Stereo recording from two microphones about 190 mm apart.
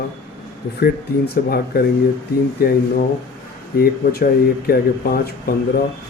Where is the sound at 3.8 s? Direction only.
55° left (ahead or behind).